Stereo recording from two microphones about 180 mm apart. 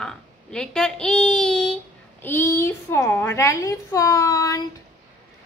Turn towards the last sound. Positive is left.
turn(degrees=20)  # may be behind; listen again after turning